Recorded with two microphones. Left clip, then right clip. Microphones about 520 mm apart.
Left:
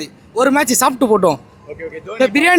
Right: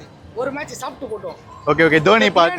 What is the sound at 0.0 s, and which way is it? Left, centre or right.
Speech, left.